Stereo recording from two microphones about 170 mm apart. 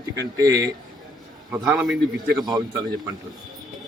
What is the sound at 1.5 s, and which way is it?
Speech, 5° right (ahead or behind).